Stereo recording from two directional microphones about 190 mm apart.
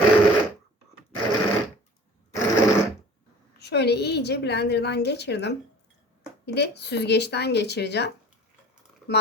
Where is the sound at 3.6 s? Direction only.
60° left (ahead or behind).